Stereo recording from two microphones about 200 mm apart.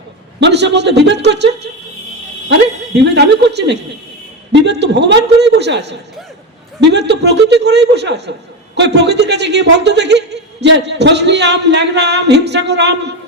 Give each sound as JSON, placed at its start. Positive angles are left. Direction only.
{"t": 0.3, "sound": "a man's voice", "side_deg": -60}
{"t": 2.5, "sound": "a woman's voice", "side_deg": -60}